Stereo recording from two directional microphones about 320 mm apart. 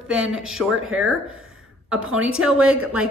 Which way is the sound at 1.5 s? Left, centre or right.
Centre.